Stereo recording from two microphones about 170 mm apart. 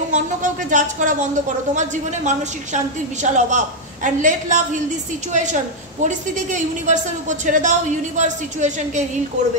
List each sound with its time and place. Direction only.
0.1 s speech: 50° right (ahead or behind)